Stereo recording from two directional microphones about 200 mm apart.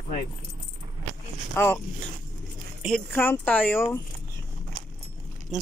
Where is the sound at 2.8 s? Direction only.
Centre (ahead or behind).